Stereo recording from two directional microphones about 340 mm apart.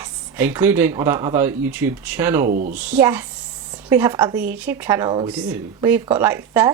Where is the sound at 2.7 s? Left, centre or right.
Centre.